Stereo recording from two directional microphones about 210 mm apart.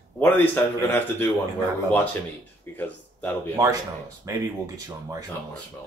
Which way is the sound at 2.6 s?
10° left (ahead or behind).